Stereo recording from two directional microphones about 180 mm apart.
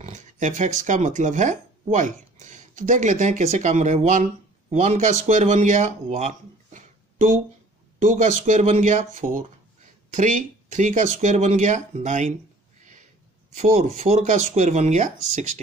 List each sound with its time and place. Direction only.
0.0 s speech: 40° right (ahead or behind)
13.6 s speech: 40° right (ahead or behind)